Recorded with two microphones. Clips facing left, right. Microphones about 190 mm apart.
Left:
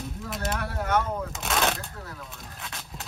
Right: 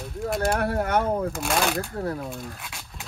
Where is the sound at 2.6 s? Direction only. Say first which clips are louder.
Left 1 dB; centre (ahead or behind).